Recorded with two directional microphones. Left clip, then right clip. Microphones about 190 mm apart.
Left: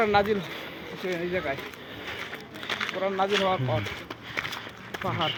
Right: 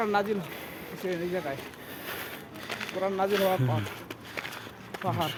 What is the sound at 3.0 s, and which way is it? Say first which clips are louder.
Speech: left 1 dB; 15° right (ahead or behind).